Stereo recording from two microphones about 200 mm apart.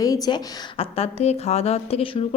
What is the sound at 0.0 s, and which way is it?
A woman's voice, 20° left (ahead or behind).